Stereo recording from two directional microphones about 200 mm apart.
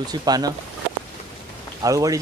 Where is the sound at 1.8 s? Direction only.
15° right (ahead or behind).